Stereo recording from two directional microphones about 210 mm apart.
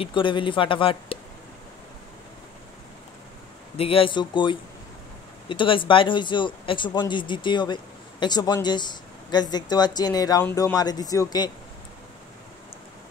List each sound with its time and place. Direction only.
0.0 s speech: 25° left (ahead or behind)
3.7 s speech: 25° left (ahead or behind)